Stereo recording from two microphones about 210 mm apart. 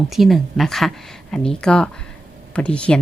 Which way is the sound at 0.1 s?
Centre (ahead or behind).